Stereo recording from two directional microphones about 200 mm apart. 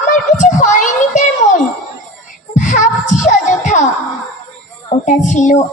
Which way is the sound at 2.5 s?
40° left (ahead or behind).